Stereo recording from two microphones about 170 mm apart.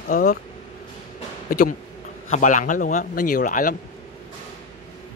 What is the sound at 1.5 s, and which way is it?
Speech, 50° left (ahead or behind).